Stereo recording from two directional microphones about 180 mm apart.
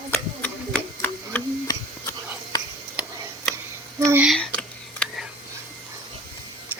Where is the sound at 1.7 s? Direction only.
25° left (ahead or behind).